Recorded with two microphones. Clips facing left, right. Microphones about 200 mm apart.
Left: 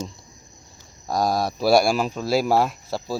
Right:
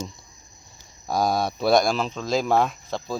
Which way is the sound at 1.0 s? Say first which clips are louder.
Left 1 dB; centre (ahead or behind).